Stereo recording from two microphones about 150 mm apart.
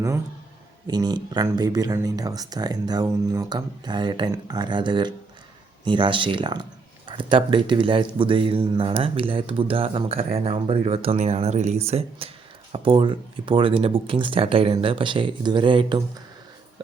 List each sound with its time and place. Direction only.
0.9 s speech: 25° right (ahead or behind)